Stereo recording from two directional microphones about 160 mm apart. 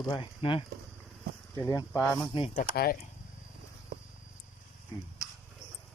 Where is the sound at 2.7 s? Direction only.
70° left (ahead or behind).